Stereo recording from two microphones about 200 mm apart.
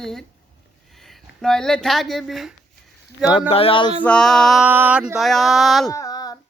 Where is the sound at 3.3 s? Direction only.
25° left (ahead or behind).